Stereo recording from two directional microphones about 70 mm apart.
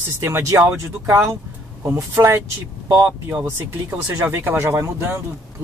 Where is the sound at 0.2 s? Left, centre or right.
Right.